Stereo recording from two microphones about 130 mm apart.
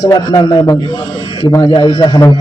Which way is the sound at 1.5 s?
30° left (ahead or behind).